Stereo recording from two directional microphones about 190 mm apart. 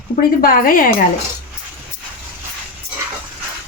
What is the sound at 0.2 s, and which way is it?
Speech, 50° left (ahead or behind).